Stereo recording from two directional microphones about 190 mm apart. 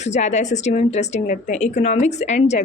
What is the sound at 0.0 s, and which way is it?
A woman's voice, 35° left (ahead or behind).